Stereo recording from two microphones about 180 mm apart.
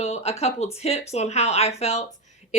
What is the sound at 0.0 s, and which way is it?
A woman's voice, 35° left (ahead or behind).